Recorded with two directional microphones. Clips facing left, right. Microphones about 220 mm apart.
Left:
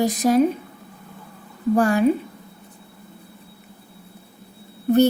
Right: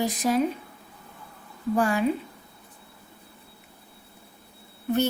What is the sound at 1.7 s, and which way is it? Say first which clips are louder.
Speech: left 6 dB; 45° left (ahead or behind).